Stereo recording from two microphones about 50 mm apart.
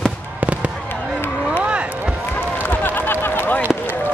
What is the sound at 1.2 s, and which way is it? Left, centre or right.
Run, left.